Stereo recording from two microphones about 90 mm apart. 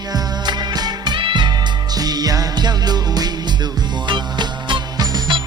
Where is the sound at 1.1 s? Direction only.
65° right (ahead or behind).